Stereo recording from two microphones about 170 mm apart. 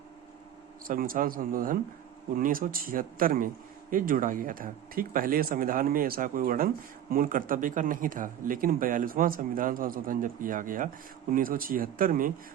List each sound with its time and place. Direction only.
0.9 s a man's voice: 55° right (ahead or behind)